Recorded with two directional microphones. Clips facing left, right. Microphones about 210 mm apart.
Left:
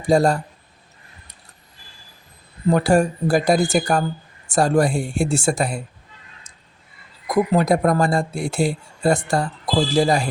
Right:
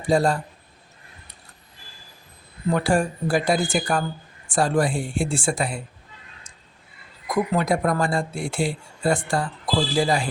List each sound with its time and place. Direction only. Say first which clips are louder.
0.1 s speech: left 4 dB; 40° left (ahead or behind)
2.6 s speech: left 5 dB; 40° left (ahead or behind)
7.3 s speech: left 4 dB; 40° left (ahead or behind)